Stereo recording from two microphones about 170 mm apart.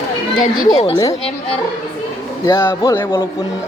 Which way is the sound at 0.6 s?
35° left (ahead or behind).